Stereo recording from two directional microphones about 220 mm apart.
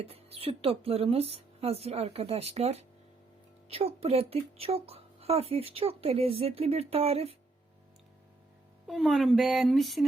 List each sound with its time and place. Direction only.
0.0 s speech: 25° right (ahead or behind)
8.9 s speech: centre (ahead or behind)